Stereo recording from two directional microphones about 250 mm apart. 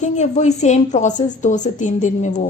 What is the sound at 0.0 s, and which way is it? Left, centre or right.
A woman's voice, left.